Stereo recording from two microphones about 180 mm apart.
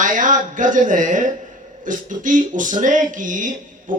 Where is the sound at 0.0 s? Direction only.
45° right (ahead or behind).